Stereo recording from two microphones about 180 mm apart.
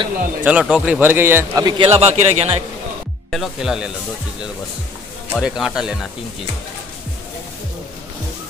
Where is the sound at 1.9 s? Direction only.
35° right (ahead or behind).